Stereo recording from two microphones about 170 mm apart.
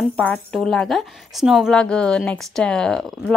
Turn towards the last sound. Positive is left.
turn(degrees=5)  # may be behind; listen again after turning